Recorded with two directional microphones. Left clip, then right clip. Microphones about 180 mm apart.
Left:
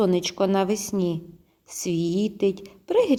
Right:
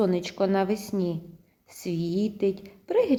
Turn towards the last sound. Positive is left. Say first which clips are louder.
# left 3 dB
turn(degrees=30)  # may be behind; listen again after turning